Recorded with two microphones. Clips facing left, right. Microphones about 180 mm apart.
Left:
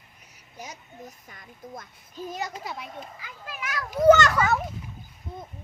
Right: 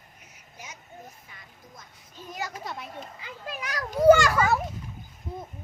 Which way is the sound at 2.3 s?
20° left (ahead or behind).